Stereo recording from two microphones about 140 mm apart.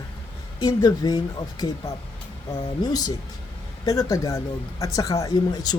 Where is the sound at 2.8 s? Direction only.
30° left (ahead or behind).